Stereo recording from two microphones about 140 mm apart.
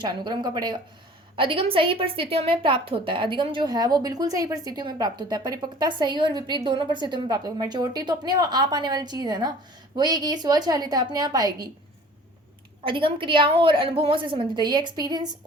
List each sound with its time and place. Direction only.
0.0 s a woman's voice: 30° right (ahead or behind)
12.8 s a woman's voice: 40° right (ahead or behind)